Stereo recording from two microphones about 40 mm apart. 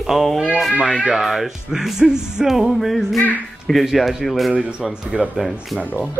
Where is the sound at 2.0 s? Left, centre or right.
Centre.